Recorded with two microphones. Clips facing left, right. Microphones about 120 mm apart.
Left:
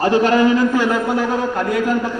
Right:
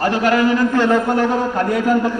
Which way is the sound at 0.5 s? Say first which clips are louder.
Right 1 dB; 10° left (ahead or behind).